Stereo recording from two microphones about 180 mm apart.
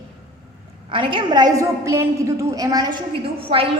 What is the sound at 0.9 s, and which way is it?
A woman's voice, 25° right (ahead or behind).